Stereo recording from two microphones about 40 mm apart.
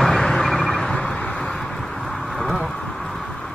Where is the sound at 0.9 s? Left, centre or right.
Left.